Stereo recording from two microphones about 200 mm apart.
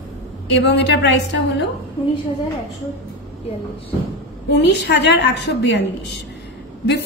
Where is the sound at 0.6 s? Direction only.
60° left (ahead or behind).